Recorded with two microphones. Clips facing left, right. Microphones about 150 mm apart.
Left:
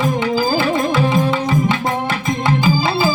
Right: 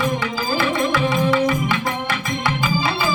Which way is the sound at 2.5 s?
35° left (ahead or behind).